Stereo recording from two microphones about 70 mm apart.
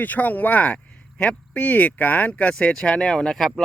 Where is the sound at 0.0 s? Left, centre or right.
Left.